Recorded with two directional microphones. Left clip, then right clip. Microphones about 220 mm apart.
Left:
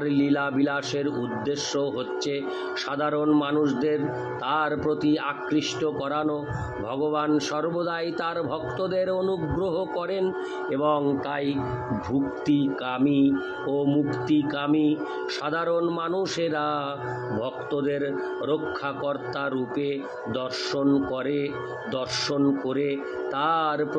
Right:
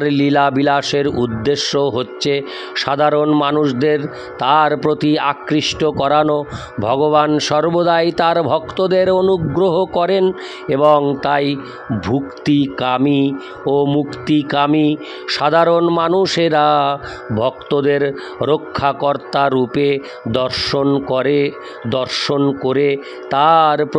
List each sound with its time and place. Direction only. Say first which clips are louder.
0.0 s speech: right 11 dB; 45° right (ahead or behind)